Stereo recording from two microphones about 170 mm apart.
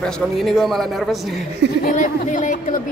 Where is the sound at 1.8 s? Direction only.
50° left (ahead or behind).